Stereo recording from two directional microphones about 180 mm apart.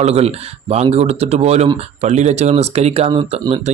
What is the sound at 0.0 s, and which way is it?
Speech, 35° right (ahead or behind).